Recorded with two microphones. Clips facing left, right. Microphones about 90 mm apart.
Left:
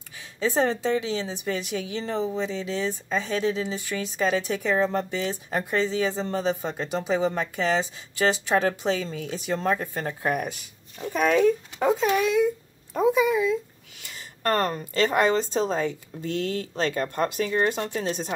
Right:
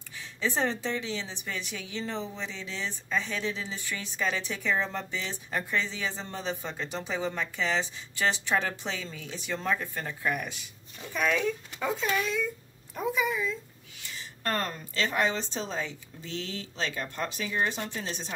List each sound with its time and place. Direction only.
0.4 s speech: 45° left (ahead or behind); by 12.4 s 60° left (ahead or behind)
12.9 s a woman's voice: 90° left
14.4 s speech: 50° left (ahead or behind)